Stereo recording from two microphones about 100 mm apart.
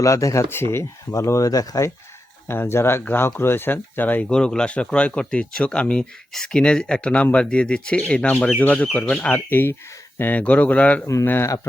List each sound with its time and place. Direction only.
0.0 s speech: 35° left (ahead or behind)
2.5 s speech: 25° left (ahead or behind)
11.0 s speech: 30° left (ahead or behind)